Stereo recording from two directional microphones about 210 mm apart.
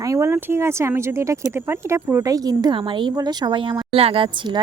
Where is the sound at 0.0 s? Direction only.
15° right (ahead or behind).